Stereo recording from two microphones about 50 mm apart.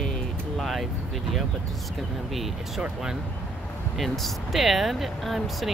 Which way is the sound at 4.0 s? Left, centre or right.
Centre.